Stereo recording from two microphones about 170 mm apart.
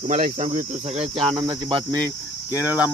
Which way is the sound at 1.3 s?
20° right (ahead or behind).